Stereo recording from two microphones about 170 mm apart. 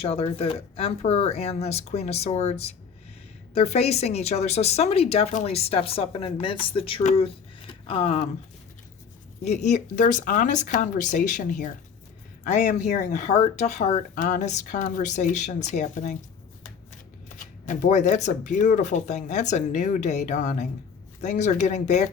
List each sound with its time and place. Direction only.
0.0 s a woman's voice: 35° left (ahead or behind)
9.4 s speech: 40° left (ahead or behind)
17.2 s speech: 50° left (ahead or behind)